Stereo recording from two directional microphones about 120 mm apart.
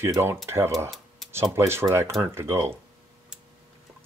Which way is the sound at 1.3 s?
25° right (ahead or behind).